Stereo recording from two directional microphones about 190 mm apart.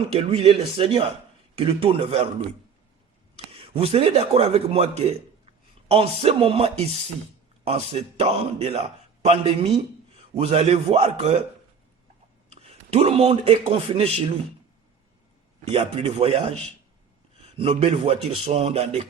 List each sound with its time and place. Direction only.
0.2 s a man's voice: 30° right (ahead or behind)
3.5 s a man's voice: 30° right (ahead or behind)
12.5 s a man's voice: 35° right (ahead or behind)
15.7 s a man's voice: 30° right (ahead or behind)